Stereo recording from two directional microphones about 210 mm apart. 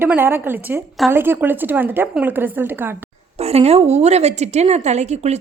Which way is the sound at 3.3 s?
30° right (ahead or behind).